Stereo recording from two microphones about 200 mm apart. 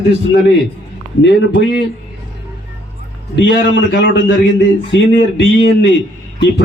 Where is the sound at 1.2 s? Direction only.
60° left (ahead or behind).